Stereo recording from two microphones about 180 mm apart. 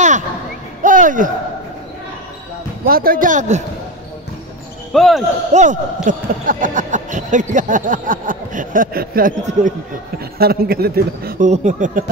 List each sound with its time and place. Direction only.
0.8 s a sound: 45° right (ahead or behind)
2.8 s speech: 55° right (ahead or behind)
4.9 s speech: centre (ahead or behind)
5.5 s speech: 40° right (ahead or behind)